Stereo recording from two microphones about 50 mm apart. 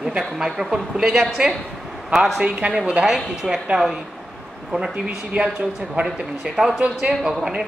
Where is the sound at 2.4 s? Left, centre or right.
Right.